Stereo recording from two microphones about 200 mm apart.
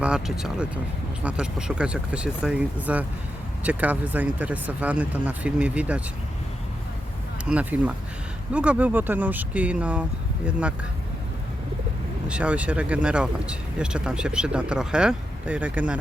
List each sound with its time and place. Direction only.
0.0 s speech: 5° right (ahead or behind)
7.4 s speech: 5° right (ahead or behind)
12.3 s speech: 5° right (ahead or behind)